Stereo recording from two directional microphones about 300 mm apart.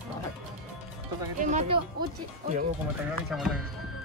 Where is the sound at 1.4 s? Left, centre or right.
Right.